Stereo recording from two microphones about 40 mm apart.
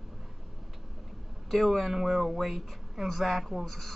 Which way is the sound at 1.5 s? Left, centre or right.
Centre.